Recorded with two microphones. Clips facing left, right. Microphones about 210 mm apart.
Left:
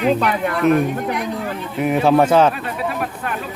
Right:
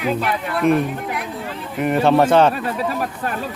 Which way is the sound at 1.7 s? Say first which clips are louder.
Left 1 dB; 5° left (ahead or behind).